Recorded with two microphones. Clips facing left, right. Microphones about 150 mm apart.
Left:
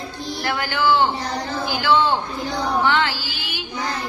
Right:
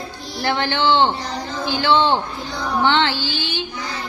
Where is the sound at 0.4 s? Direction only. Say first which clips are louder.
Right 2 dB; 30° right (ahead or behind).